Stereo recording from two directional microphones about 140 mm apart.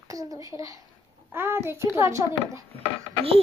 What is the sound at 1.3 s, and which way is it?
Singing, 15° right (ahead or behind).